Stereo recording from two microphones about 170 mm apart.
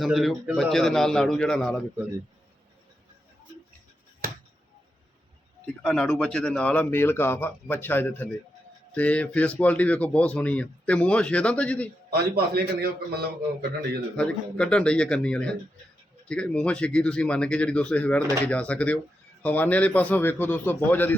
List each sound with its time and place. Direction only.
0.0 s a man's voice: centre (ahead or behind)
5.8 s speech: 5° left (ahead or behind)
12.1 s a man's voice: 65° right (ahead or behind)
14.2 s a man's voice: 5° left (ahead or behind)